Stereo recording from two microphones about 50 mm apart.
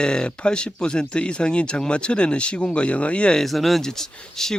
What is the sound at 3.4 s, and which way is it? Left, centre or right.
Speech, centre.